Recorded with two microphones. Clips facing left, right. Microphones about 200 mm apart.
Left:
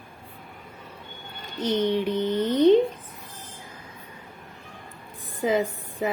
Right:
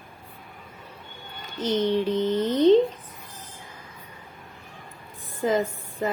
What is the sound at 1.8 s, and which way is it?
Mantra, 10° left (ahead or behind).